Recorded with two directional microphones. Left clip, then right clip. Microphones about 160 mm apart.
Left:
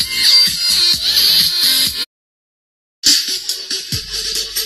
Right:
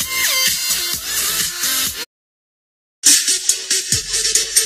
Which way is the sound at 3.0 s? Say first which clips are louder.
Left 1 dB; 25° left (ahead or behind).